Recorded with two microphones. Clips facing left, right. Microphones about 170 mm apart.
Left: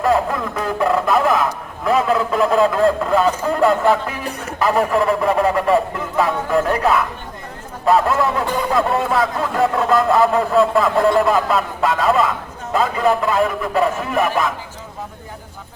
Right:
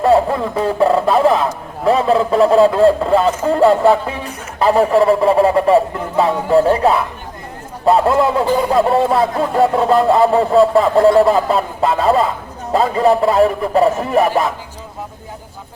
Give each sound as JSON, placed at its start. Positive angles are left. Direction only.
{"t": 0.0, "sound": "a man's voice", "side_deg": -30}